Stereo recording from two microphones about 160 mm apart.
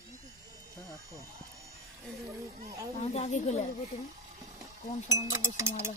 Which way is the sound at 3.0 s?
45° left (ahead or behind).